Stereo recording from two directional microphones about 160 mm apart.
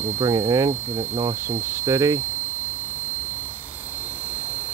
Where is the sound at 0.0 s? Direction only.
20° right (ahead or behind).